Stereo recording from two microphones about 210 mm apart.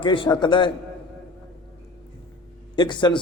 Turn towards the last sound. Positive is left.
turn(degrees=20)  # may be behind; listen again after turning